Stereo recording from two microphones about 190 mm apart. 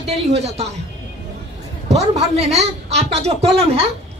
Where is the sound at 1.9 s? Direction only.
35° right (ahead or behind).